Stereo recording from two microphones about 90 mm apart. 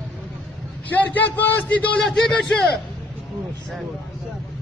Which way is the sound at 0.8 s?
20° left (ahead or behind).